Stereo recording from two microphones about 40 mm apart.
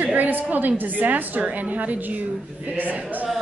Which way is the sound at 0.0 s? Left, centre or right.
Right.